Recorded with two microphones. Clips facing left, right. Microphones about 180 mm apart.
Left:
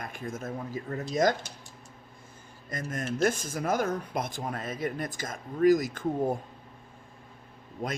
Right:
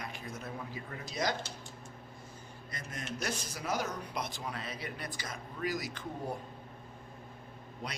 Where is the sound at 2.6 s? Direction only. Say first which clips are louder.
Left 9 dB; 50° left (ahead or behind).